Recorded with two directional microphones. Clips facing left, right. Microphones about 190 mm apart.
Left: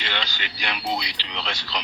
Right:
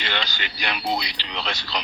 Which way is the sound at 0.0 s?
45° right (ahead or behind).